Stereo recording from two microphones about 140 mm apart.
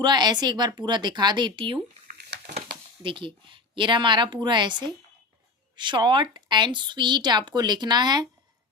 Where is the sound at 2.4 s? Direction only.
70° right (ahead or behind).